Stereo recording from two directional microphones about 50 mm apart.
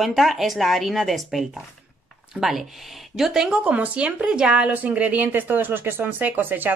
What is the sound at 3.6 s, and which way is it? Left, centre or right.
Speech, right.